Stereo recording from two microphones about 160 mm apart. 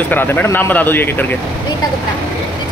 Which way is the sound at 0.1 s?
10° left (ahead or behind).